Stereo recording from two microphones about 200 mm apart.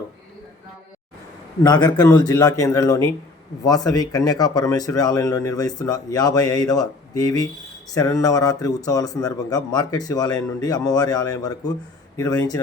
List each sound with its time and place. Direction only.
1.6 s speech: 20° left (ahead or behind)